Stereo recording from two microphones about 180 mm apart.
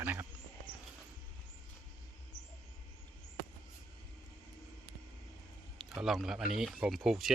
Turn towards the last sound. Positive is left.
turn(degrees=0)  # may be behind; listen again after turning